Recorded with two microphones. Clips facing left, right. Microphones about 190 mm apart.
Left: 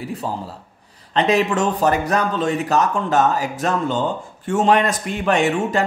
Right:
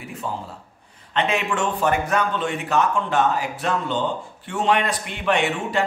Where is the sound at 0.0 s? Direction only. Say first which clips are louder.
Left 4 dB; 35° left (ahead or behind).